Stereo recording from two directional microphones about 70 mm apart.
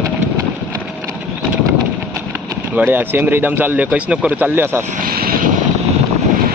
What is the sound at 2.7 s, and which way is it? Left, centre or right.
A man's voice, right.